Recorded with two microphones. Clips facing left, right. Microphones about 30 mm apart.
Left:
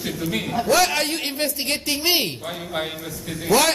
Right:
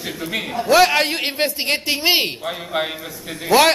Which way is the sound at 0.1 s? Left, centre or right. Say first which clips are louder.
Right 1 dB; centre.